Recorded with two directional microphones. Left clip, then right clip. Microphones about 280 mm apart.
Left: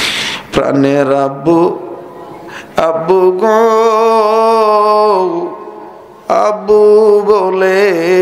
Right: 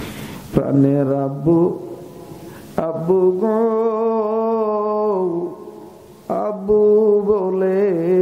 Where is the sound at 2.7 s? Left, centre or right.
Centre.